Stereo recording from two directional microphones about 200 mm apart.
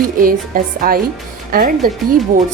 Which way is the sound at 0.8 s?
45° right (ahead or behind).